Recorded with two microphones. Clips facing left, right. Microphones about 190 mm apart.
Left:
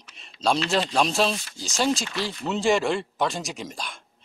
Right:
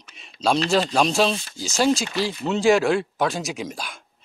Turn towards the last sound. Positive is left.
turn(degrees=-5)  # may be behind; listen again after turning